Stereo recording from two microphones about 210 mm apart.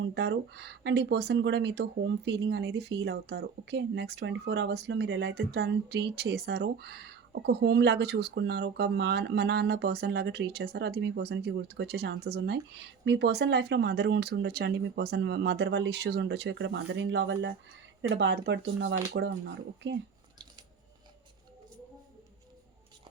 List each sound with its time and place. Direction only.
0.0 s speech: 55° right (ahead or behind)